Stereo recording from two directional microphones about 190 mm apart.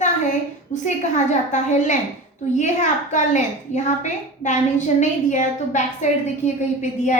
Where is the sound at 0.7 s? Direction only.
40° left (ahead or behind).